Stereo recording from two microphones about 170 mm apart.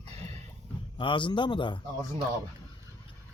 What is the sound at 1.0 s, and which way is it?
Speech, 30° left (ahead or behind).